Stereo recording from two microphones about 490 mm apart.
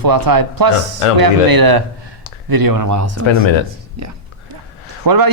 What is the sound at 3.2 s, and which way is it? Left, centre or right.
Speech, left.